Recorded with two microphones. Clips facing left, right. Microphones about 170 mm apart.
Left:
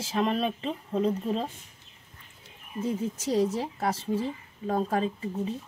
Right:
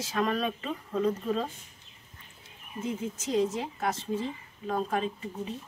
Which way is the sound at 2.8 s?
35° left (ahead or behind).